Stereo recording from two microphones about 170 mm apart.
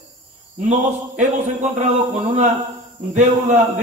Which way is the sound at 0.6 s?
45° right (ahead or behind).